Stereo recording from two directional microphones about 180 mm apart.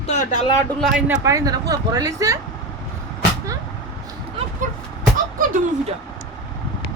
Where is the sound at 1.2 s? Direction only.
20° right (ahead or behind).